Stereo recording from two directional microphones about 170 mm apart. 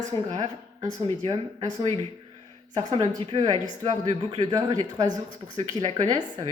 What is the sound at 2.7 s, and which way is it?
A woman's voice, 25° right (ahead or behind).